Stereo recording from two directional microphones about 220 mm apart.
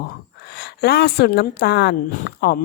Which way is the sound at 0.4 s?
50° left (ahead or behind).